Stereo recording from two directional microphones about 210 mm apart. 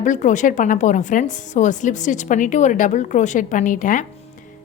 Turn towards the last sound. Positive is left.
turn(degrees=40)  # may be behind; listen again after turning